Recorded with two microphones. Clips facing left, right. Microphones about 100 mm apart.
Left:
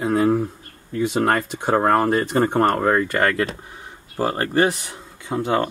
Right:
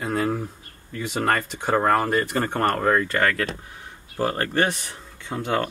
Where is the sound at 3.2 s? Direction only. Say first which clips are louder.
Left 3 dB; 25° left (ahead or behind).